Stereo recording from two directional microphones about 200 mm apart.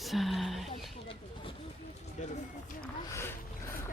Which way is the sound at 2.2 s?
35° left (ahead or behind).